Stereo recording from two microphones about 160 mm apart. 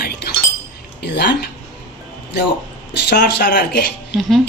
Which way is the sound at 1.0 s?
90° left.